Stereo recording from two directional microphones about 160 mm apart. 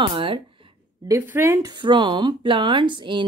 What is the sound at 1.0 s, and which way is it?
A woman's voice, 15° right (ahead or behind).